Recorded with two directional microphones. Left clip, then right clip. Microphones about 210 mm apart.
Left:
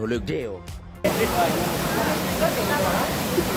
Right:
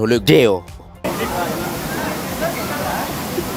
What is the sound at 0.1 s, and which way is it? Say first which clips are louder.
Speech: right 15 dB; 45° right (ahead or behind).